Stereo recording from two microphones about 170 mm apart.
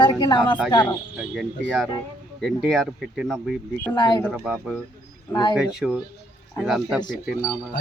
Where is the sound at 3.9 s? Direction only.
25° left (ahead or behind).